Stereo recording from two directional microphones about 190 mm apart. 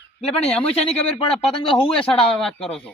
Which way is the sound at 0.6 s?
35° left (ahead or behind).